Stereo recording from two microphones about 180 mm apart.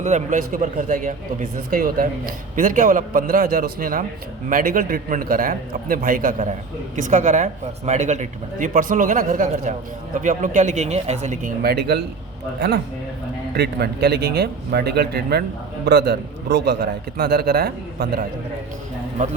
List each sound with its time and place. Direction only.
0.0 s a man's voice: 40° right (ahead or behind); by 18.3 s 60° right (ahead or behind)